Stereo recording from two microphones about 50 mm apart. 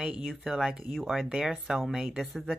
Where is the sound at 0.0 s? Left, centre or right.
Centre.